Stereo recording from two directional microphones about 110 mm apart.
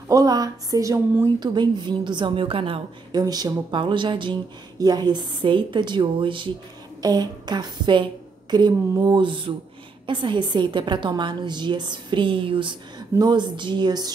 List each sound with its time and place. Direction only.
0.1 s speech: 35° right (ahead or behind); by 2.8 s 55° right (ahead or behind)
3.1 s speech: 35° right (ahead or behind)
7.0 s a woman's voice: 40° right (ahead or behind)